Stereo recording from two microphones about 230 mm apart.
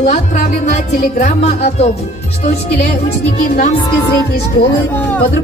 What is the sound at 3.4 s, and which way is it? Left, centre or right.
Music, left.